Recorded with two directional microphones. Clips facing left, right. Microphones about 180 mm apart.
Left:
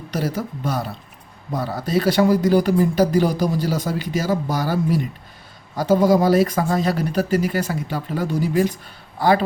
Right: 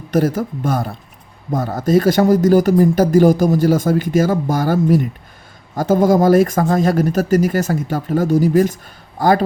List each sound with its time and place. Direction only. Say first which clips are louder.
0.1 s speech: right 8 dB; 50° right (ahead or behind)